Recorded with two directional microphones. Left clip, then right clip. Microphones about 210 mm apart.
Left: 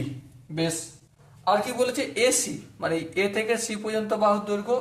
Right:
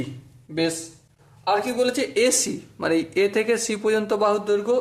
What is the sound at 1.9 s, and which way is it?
A man's voice, 40° right (ahead or behind).